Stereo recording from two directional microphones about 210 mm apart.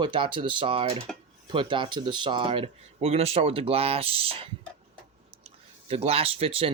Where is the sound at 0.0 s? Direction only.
25° right (ahead or behind).